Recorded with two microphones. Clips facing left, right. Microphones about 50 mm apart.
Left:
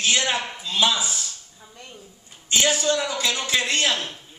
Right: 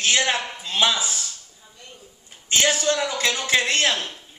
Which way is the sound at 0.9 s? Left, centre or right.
Left.